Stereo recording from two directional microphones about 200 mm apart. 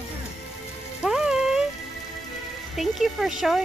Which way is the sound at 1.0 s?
5° right (ahead or behind).